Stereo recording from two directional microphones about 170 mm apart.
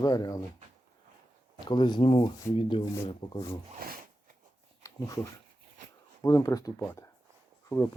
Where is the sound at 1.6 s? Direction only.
25° left (ahead or behind).